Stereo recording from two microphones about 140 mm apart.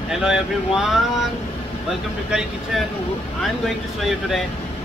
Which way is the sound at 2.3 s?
5° right (ahead or behind).